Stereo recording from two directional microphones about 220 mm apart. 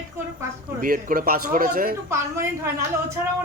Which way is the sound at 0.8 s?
40° right (ahead or behind).